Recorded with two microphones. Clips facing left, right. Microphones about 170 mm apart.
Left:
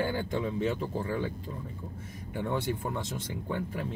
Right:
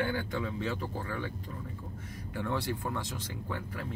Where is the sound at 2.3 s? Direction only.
20° left (ahead or behind).